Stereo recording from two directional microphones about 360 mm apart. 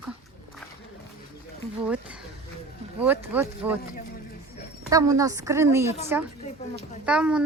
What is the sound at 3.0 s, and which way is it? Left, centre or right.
Speech, centre.